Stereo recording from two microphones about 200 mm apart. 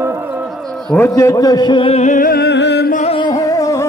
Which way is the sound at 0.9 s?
10° left (ahead or behind).